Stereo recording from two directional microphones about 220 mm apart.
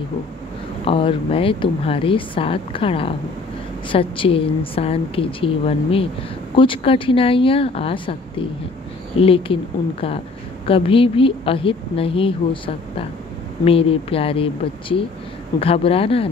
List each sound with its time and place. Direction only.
0.8 s a woman's voice: 25° left (ahead or behind)